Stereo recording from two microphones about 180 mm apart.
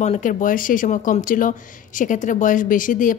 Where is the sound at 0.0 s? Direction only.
40° left (ahead or behind).